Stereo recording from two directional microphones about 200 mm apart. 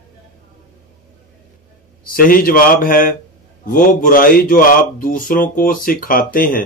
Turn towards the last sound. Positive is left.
turn(degrees=45)  # may be behind; listen again after turning